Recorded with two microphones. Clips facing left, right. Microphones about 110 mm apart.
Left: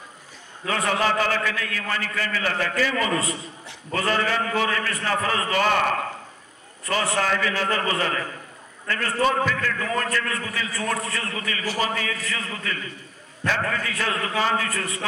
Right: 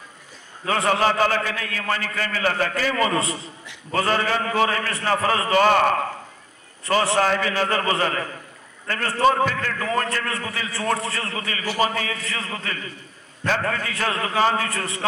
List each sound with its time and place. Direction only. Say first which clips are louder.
0.8 s a man's voice: right 3 dB; 35° right (ahead or behind)
10.7 s a man's voice: right 4 dB; 30° right (ahead or behind)
14.7 s a man's voice: right 1 dB; 30° right (ahead or behind)